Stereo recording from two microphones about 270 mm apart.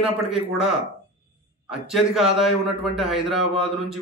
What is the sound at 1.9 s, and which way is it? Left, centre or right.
Speech, centre.